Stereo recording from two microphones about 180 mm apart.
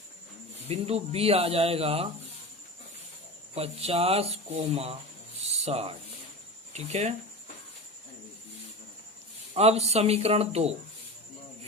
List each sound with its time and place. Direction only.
0.7 s speech: 35° right (ahead or behind)
3.5 s speech: 35° right (ahead or behind)
5.4 s cricket: 35° right (ahead or behind)
6.7 s speech: 35° right (ahead or behind)
9.6 s speech: 35° right (ahead or behind)